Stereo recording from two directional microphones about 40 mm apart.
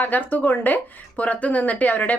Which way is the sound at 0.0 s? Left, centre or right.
Left.